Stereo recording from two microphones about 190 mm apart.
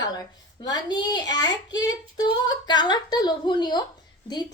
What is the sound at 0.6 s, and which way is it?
Speech, 20° left (ahead or behind).